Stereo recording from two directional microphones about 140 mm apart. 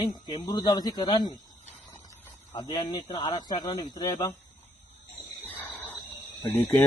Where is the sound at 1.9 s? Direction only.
20° left (ahead or behind).